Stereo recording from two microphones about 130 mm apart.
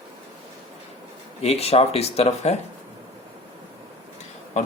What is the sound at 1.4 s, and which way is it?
Speech, 50° left (ahead or behind).